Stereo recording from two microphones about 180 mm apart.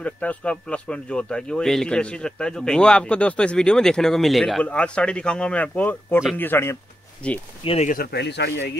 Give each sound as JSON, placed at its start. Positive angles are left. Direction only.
{"t": 0.0, "sound": "speech", "side_deg": 5}
{"t": 7.6, "sound": "speech", "side_deg": 35}
{"t": 7.9, "sound": "speech", "side_deg": 60}